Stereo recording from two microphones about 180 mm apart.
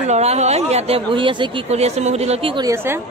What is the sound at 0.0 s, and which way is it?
Speech, 35° right (ahead or behind).